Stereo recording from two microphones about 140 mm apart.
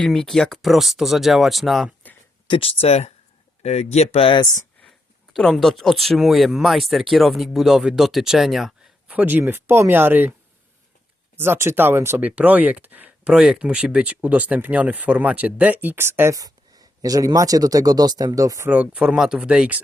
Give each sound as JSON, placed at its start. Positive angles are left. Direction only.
{"t": 0.0, "sound": "speech", "side_deg": 5}
{"t": 2.5, "sound": "speech", "side_deg": 40}
{"t": 5.3, "sound": "speech", "side_deg": 0}
{"t": 11.3, "sound": "speech", "side_deg": -15}
{"t": 18.7, "sound": "speech", "side_deg": -10}